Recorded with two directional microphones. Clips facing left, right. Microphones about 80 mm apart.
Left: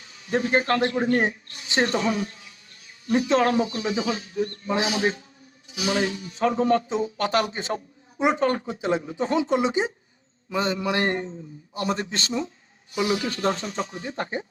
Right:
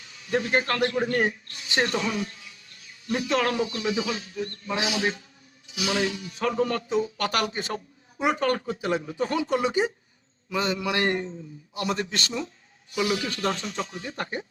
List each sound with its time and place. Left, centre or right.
0.1 s a man's voice: left